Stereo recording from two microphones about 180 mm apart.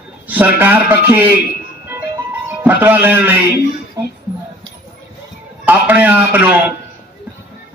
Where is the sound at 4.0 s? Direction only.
20° right (ahead or behind).